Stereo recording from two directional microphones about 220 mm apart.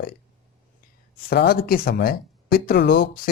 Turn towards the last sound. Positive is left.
turn(degrees=55)  # may be behind; listen again after turning